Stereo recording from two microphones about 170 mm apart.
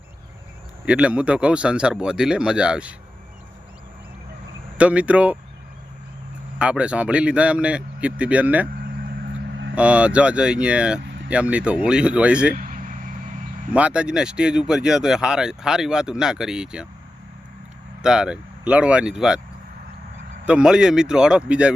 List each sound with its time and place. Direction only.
0.9 s speech: 5° right (ahead or behind)
4.8 s speech: 10° right (ahead or behind)
6.6 s speech: 5° right (ahead or behind)
9.7 s speech: 5° right (ahead or behind)
12.5 s vehicle: 50° right (ahead or behind)
13.7 s speech: 5° right (ahead or behind)
18.0 s speech: 5° right (ahead or behind)
20.4 s speech: 5° right (ahead or behind)